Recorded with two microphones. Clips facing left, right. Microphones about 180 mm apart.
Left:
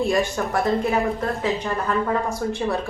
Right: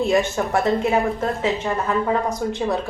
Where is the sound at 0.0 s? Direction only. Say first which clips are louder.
Right 2 dB; 25° right (ahead or behind).